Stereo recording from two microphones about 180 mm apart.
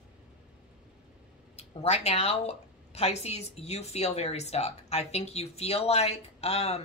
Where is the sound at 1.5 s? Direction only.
35° left (ahead or behind).